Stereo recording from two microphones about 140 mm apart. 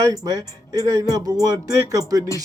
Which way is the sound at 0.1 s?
25° right (ahead or behind).